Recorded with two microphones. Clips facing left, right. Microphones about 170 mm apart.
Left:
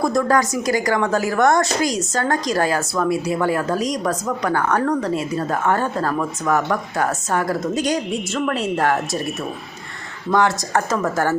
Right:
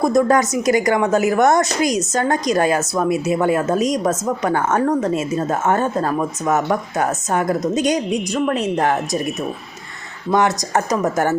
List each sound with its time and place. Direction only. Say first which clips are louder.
0.0 s a woman's voice: right 3 dB; 20° right (ahead or behind)
10.3 s a woman's voice: right 1 dB; 20° right (ahead or behind)